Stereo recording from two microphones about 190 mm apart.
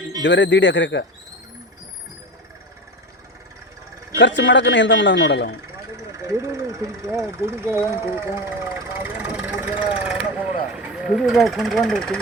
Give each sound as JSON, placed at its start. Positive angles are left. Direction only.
{"t": 0.2, "sound": "speech", "side_deg": 75}
{"t": 4.2, "sound": "speech", "side_deg": 70}
{"t": 6.1, "sound": "vehicle", "side_deg": -15}
{"t": 10.8, "sound": "speech", "side_deg": -5}